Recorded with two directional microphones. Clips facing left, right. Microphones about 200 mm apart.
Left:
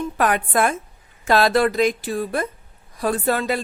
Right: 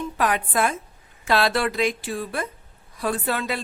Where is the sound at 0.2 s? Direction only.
50° left (ahead or behind).